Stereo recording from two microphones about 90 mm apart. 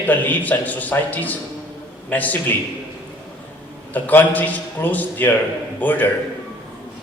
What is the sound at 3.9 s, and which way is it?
A man's voice, 20° left (ahead or behind).